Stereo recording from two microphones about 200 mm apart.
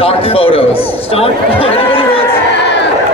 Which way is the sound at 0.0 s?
30° left (ahead or behind).